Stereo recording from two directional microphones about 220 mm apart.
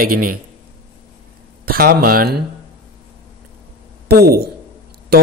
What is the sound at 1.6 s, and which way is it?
Speech, 40° right (ahead or behind).